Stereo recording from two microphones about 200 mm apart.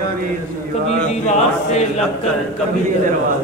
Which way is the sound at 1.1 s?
35° left (ahead or behind).